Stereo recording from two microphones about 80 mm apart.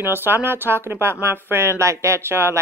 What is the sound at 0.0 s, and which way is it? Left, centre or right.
Speech, right.